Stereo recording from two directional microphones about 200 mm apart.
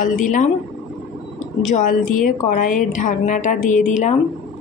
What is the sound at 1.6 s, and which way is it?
A woman's voice, 40° left (ahead or behind).